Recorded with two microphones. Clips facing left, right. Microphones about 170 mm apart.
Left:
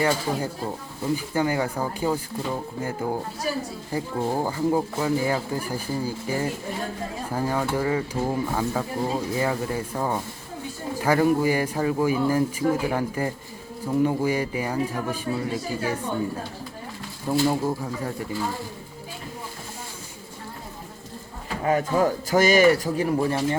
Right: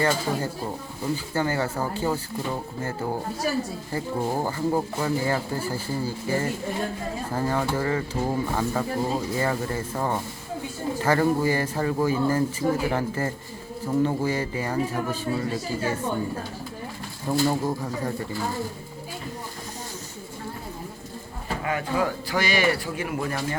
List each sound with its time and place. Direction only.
0.0 s speech: 10° left (ahead or behind)
2.5 s music: 5° left (ahead or behind)
3.9 s speech: 10° left (ahead or behind)
11.0 s speech: 10° left (ahead or behind)
17.4 s speech: 5° left (ahead or behind)
21.6 s speech: 35° left (ahead or behind)